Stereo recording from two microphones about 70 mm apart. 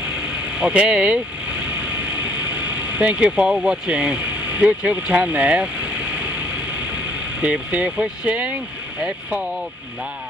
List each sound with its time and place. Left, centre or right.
0.6 s speech: centre
2.5 s speech: centre
7.4 s speech: centre